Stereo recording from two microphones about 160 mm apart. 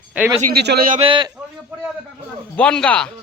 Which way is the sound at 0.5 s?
80° right.